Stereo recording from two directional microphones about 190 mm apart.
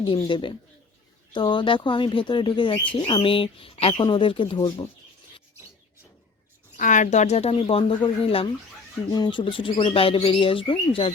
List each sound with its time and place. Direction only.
0.0 s speech: 25° left (ahead or behind)
6.7 s speech: 40° left (ahead or behind)